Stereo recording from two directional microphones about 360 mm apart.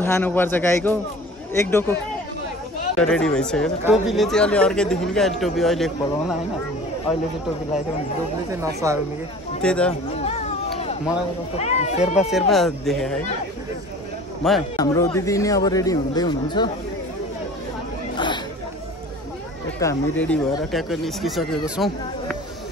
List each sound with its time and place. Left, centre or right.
0.0 s speech: centre
3.0 s speech: centre
8.5 s speech: centre
9.6 s speech: centre
10.2 s speech: centre
12.3 s speech: centre
14.4 s speech: centre
18.1 s chatter: centre
19.8 s speech: centre